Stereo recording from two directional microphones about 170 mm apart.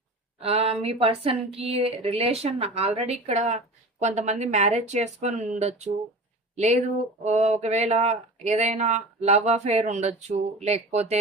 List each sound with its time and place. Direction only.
0.4 s speech: 35° right (ahead or behind)